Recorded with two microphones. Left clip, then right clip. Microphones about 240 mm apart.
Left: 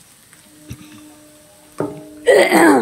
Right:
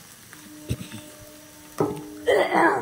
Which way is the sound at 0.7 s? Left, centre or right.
Right.